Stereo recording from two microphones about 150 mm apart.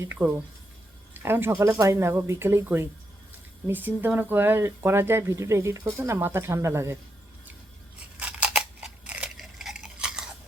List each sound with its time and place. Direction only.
0.0 s speech: 15° right (ahead or behind)
7.9 s scissors: 10° right (ahead or behind)